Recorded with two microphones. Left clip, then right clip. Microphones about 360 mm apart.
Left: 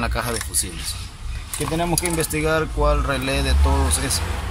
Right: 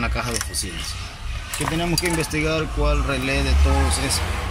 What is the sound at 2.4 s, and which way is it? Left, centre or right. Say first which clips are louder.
Speech: left 6 dB; centre.